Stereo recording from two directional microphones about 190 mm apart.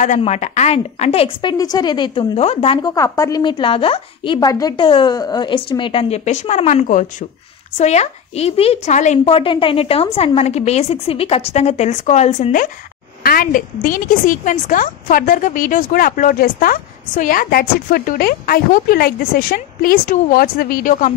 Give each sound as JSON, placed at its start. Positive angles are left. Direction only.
{"t": 0.0, "sound": "a woman's voice", "side_deg": 40}
{"t": 2.9, "sound": "a woman's voice", "side_deg": 15}